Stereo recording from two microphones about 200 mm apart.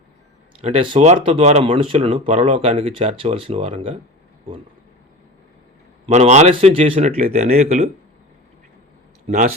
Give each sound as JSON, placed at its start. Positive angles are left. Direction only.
{"t": 0.6, "sound": "speech", "side_deg": -30}
{"t": 6.1, "sound": "speech", "side_deg": -35}
{"t": 9.2, "sound": "speech", "side_deg": -35}